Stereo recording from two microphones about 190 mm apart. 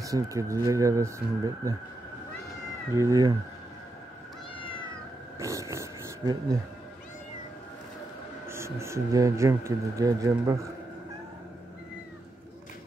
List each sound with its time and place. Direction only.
0.0 s speech: 15° right (ahead or behind)
3.0 s speech: 20° right (ahead or behind)
5.4 s speech: 15° right (ahead or behind)
8.5 s speech: 15° right (ahead or behind)